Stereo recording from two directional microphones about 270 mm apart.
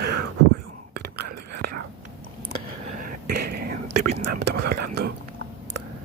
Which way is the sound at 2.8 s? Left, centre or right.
Right.